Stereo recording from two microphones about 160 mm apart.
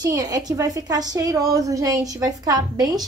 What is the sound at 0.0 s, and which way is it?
A woman's voice, 25° right (ahead or behind).